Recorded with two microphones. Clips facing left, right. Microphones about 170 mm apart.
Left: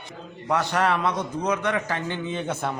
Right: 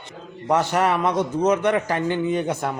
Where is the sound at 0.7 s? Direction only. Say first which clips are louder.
Right 3 dB; 10° right (ahead or behind).